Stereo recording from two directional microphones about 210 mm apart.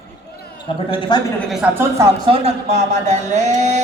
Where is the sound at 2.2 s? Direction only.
30° right (ahead or behind).